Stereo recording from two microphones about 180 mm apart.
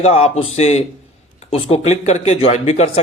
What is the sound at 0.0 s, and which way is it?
Speech, 35° left (ahead or behind).